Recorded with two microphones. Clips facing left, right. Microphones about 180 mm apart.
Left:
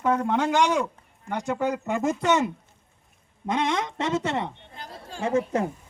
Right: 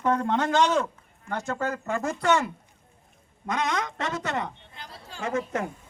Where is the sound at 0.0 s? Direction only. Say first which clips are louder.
Left 1 dB; 10° left (ahead or behind); by 4.5 s 25° left (ahead or behind).